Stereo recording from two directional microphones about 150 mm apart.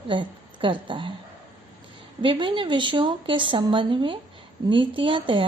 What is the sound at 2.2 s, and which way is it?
A woman's voice, 35° right (ahead or behind).